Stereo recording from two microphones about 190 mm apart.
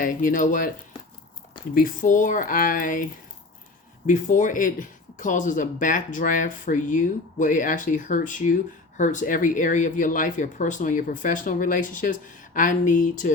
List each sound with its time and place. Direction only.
0.0 s speech: 45° left (ahead or behind)
1.7 s speech: 45° left (ahead or behind)